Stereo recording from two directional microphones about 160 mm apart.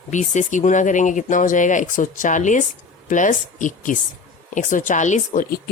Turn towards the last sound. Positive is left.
turn(degrees=50)  # may be behind; listen again after turning